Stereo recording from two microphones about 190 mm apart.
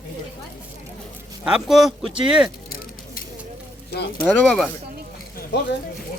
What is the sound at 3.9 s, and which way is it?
Speech, 60° left (ahead or behind).